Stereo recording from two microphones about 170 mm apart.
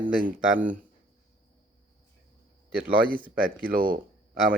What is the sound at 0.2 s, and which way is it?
Speech, 55° right (ahead or behind).